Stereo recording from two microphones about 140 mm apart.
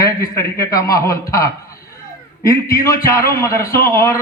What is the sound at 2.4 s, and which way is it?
A man's voice, 20° left (ahead or behind).